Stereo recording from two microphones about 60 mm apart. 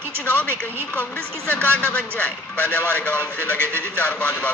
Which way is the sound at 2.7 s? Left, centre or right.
Left.